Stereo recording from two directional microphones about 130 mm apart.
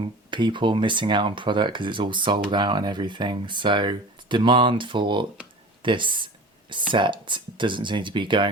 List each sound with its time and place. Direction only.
0.0 s speech: 40° right (ahead or behind)
5.8 s a sound: 40° right (ahead or behind)
6.9 s speech: 40° right (ahead or behind)